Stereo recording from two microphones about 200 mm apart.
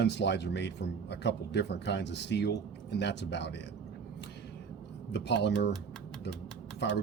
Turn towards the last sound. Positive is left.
turn(degrees=60)  # may be behind; listen again after turning